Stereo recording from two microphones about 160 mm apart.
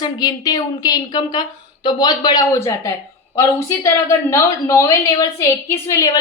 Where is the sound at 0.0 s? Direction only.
25° left (ahead or behind).